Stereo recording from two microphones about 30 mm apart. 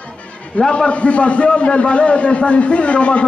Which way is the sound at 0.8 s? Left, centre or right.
Left.